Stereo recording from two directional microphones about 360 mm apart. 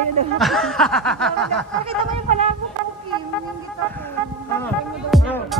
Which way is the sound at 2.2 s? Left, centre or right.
Centre.